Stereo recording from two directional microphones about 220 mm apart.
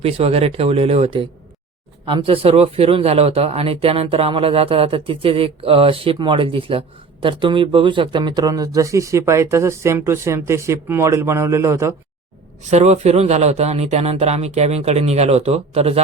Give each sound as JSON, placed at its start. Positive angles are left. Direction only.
{"t": 0.0, "sound": "speech", "side_deg": -25}
{"t": 12.7, "sound": "speech", "side_deg": -30}